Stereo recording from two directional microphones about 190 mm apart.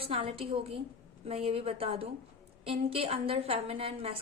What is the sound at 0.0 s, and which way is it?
A woman's voice, 30° right (ahead or behind).